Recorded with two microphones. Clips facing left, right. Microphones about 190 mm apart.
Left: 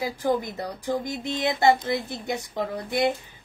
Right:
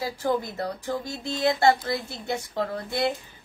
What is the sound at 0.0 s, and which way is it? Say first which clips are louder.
A woman's voice: left 1 dB; 15° left (ahead or behind).